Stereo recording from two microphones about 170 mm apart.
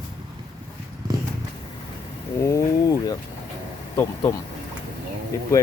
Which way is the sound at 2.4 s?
20° left (ahead or behind).